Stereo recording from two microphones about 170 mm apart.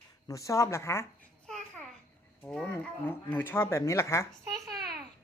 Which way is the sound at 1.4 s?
5° left (ahead or behind).